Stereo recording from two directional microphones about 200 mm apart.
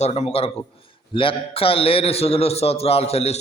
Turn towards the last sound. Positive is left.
turn(degrees=30)  # may be behind; listen again after turning